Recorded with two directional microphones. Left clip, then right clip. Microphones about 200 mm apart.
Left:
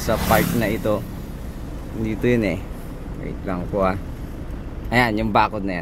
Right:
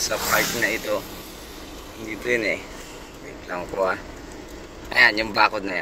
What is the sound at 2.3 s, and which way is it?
Speech, 15° left (ahead or behind).